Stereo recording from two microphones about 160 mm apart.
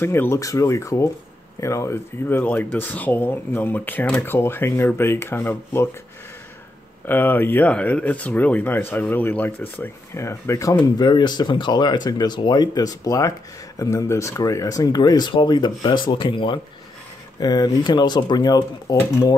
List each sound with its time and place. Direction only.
0.0 s speech: 15° left (ahead or behind)
7.1 s speech: 15° left (ahead or behind)